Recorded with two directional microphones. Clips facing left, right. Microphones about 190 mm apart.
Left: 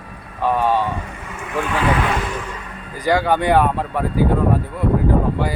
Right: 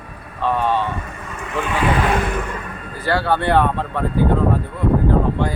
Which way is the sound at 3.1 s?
15° left (ahead or behind).